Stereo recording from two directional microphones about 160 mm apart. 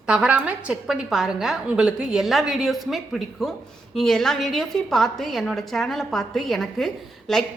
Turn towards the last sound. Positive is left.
turn(degrees=0)  # may be behind; listen again after turning